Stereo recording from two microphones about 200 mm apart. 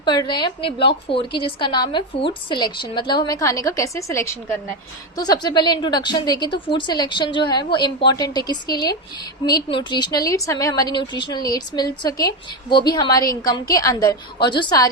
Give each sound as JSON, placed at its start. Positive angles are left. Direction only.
{"t": 0.0, "sound": "a woman's voice", "side_deg": 20}